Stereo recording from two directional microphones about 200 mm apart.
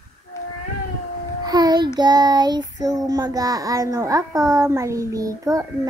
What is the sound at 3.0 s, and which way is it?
A child's voice, 20° right (ahead or behind).